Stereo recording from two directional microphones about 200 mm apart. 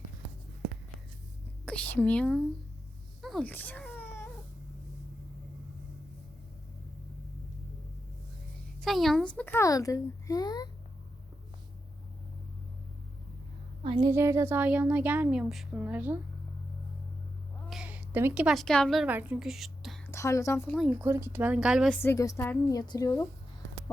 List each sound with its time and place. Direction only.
1.6 s a woman's voice: 5° left (ahead or behind)
3.2 s wail: centre (ahead or behind)
8.8 s a child's voice: centre (ahead or behind); by 10.7 s 20° left (ahead or behind)
13.8 s a woman's voice: 20° right (ahead or behind)
17.7 s a woman's voice: 5° right (ahead or behind)
20.1 s a woman's voice: 15° left (ahead or behind)
20.7 s a woman's voice: 5° right (ahead or behind)
22.0 s a child's voice: 15° left (ahead or behind)